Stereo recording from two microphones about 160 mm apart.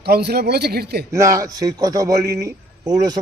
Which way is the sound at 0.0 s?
90° right.